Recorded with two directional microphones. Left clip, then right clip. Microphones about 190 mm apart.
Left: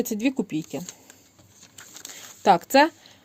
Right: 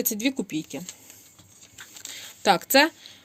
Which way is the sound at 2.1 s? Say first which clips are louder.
Left 3 dB; 35° left (ahead or behind).